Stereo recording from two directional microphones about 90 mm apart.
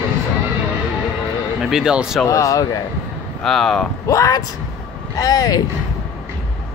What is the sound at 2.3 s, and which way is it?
Speech, 35° left (ahead or behind).